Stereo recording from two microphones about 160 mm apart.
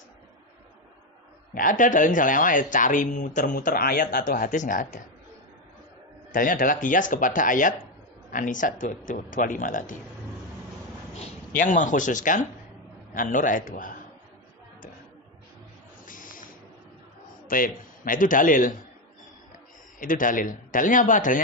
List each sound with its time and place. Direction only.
1.5 s speech: 60° left (ahead or behind)
6.3 s speech: 60° left (ahead or behind)
11.1 s speech: 55° left (ahead or behind)
16.1 s a sound: 55° left (ahead or behind)
17.5 s speech: 60° left (ahead or behind)
20.0 s speech: 55° left (ahead or behind)